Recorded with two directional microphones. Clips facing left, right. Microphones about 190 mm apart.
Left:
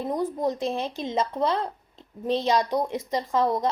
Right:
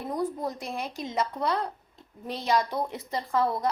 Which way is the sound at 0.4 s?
20° left (ahead or behind).